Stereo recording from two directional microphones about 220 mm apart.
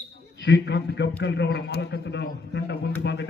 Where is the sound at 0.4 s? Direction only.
55° left (ahead or behind).